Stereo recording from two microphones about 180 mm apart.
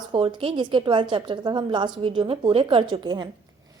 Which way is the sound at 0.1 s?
30° right (ahead or behind).